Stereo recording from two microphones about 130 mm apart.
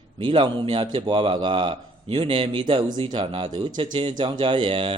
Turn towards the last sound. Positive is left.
turn(degrees=-45)  # may be behind; listen again after turning